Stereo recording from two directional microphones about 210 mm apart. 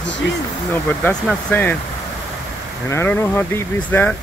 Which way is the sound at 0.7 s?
5° left (ahead or behind).